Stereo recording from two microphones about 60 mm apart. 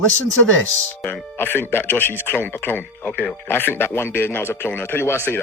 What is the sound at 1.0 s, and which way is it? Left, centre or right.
Speech, left.